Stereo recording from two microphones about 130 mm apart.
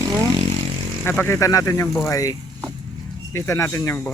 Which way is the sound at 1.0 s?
15° left (ahead or behind).